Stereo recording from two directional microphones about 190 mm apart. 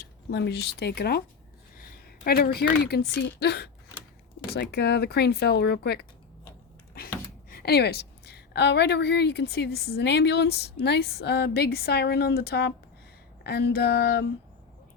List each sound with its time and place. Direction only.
0.0 s a woman's voice: 60° left (ahead or behind)
7.5 s a woman's voice: 55° left (ahead or behind)